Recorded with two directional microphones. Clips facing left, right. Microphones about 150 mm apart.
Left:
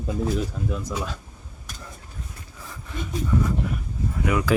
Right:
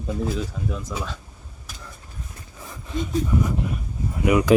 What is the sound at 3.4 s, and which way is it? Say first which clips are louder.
Speech: right 1 dB; 20° right (ahead or behind).